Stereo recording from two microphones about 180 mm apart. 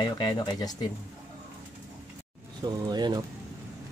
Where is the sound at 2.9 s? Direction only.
25° right (ahead or behind).